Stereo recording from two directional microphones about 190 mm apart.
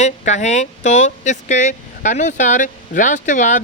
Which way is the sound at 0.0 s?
40° left (ahead or behind).